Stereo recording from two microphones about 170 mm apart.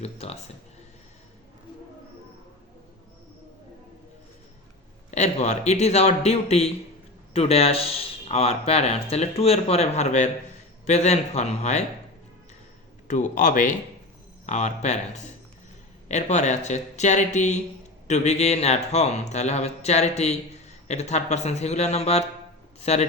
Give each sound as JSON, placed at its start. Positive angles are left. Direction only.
{"t": 0.0, "sound": "speech", "side_deg": 40}
{"t": 5.1, "sound": "speech", "side_deg": 40}
{"t": 13.1, "sound": "speech", "side_deg": 45}
{"t": 16.0, "sound": "speech", "side_deg": 45}